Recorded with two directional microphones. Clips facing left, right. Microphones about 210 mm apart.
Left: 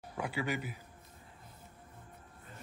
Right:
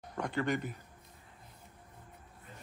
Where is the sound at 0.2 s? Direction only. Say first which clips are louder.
Right 3 dB; 5° left (ahead or behind).